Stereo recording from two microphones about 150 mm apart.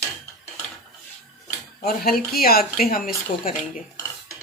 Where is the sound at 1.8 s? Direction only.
80° left.